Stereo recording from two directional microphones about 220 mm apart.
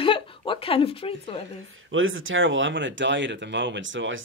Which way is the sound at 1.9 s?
65° right (ahead or behind).